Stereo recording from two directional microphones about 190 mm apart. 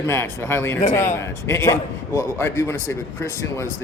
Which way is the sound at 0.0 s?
15° left (ahead or behind).